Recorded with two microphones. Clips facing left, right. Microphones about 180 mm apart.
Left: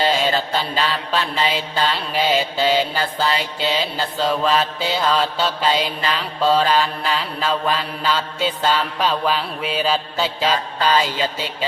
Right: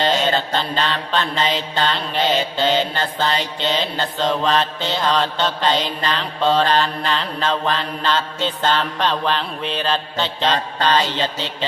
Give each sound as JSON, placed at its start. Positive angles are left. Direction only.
{"t": 0.0, "sound": "mantra", "side_deg": 5}